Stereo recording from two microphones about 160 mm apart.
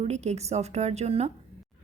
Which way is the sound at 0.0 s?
45° right (ahead or behind).